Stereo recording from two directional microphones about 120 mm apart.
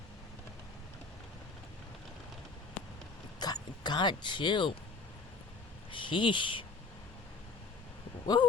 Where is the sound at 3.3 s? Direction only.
35° left (ahead or behind).